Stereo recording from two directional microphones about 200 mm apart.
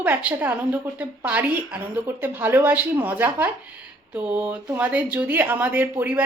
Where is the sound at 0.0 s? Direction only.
5° right (ahead or behind).